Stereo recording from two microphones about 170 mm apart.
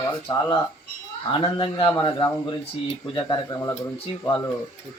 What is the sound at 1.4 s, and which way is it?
Speech, 30° left (ahead or behind).